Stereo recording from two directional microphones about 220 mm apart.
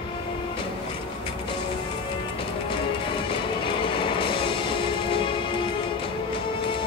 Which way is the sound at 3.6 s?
25° left (ahead or behind).